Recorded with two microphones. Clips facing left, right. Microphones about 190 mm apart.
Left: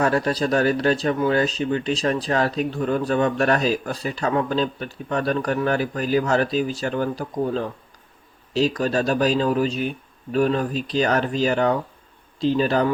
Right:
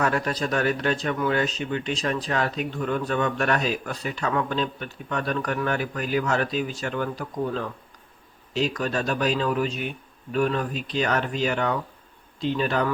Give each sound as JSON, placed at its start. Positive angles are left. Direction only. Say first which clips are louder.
{"t": 0.0, "sound": "speech", "louder": "left 4 dB", "side_deg": 30}